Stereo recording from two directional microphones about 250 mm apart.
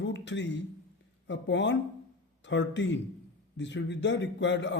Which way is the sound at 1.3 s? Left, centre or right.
Left.